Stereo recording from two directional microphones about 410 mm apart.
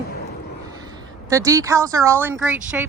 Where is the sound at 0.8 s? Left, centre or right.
Centre.